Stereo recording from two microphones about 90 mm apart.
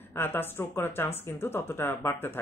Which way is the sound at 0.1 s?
25° left (ahead or behind).